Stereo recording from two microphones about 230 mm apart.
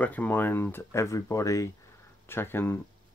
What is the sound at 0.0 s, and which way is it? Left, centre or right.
Speech, centre.